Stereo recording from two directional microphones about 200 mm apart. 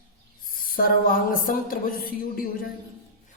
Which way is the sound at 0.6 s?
45° left (ahead or behind).